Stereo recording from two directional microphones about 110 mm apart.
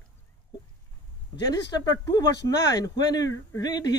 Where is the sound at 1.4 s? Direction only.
35° left (ahead or behind).